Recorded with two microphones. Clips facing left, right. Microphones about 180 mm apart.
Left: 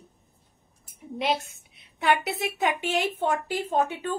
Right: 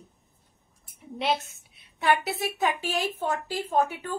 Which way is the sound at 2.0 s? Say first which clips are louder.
Even; 20° left (ahead or behind).